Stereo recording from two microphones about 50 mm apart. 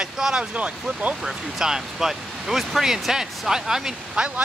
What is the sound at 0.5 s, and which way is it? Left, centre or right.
Speech, right.